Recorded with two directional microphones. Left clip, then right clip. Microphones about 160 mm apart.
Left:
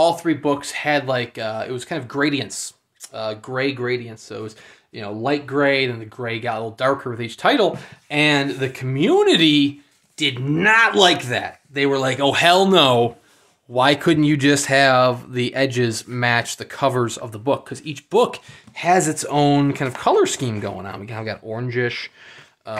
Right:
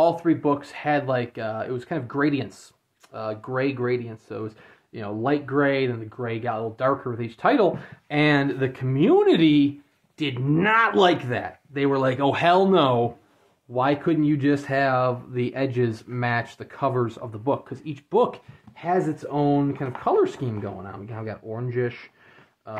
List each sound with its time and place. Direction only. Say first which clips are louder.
0.0 s speech: left 3 dB; 10° left (ahead or behind)
12.7 s speech: left 5 dB; 35° left (ahead or behind)
18.8 s speech: left 7 dB; 40° left (ahead or behind)